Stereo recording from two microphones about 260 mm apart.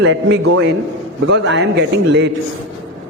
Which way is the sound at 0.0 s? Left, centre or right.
Right.